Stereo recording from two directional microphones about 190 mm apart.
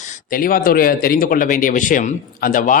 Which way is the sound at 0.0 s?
50° left (ahead or behind).